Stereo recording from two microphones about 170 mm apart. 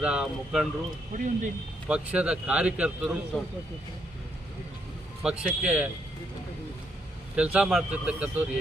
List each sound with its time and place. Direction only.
0.0 s speech: 5° right (ahead or behind)
1.1 s speech: 50° right (ahead or behind)
1.9 s speech: 5° right (ahead or behind)
5.2 s speech: 5° right (ahead or behind)
7.3 s speech: 5° right (ahead or behind)